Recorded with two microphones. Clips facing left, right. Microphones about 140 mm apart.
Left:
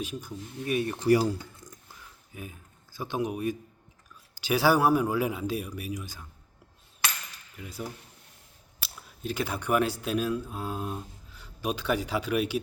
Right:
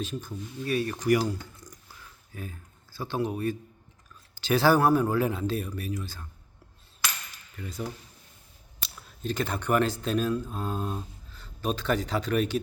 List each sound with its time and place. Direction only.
0.0 s speech: 10° left (ahead or behind); by 1.2 s 30° left (ahead or behind)
1.6 s a sound: centre (ahead or behind)
2.3 s speech: 15° left (ahead or behind)
7.5 s speech: 10° left (ahead or behind)